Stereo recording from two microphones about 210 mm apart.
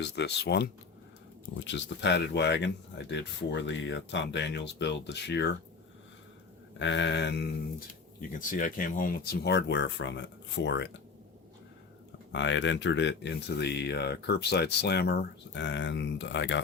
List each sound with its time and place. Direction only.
0.0 s speech: 55° left (ahead or behind)
6.7 s speech: 60° left (ahead or behind)
8.2 s speech: 40° left (ahead or behind); by 10.8 s 55° left (ahead or behind)
12.3 s speech: 60° left (ahead or behind)